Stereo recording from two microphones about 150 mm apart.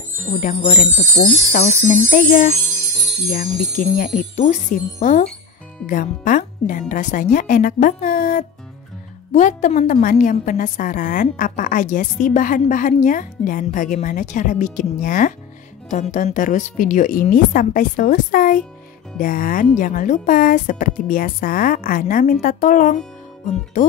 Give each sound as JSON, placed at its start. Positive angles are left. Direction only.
{"t": 0.3, "sound": "a woman's voice", "side_deg": 60}
{"t": 3.3, "sound": "a woman's voice", "side_deg": 70}
{"t": 9.3, "sound": "a woman's voice", "side_deg": 55}